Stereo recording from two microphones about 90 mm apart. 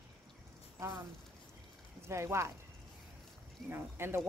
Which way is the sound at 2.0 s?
30° right (ahead or behind).